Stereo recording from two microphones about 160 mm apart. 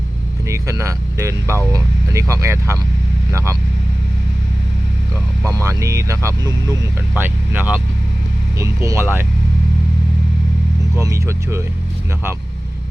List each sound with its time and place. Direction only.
0.4 s speech: 20° right (ahead or behind)
5.6 s speech: 20° right (ahead or behind)
11.0 s speech: 20° right (ahead or behind)